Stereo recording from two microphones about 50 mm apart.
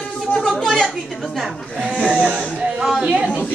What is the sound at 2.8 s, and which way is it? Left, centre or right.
Speech, centre.